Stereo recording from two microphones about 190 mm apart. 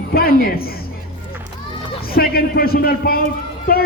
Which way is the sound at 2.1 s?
50° left (ahead or behind).